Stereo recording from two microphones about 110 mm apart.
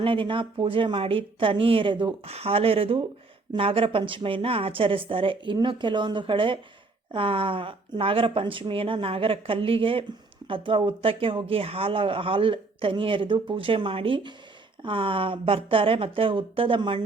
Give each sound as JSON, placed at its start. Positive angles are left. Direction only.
{"t": 0.0, "sound": "speech", "side_deg": -55}